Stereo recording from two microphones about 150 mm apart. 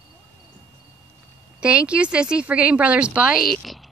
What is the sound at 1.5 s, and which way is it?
Speech, 5° right (ahead or behind).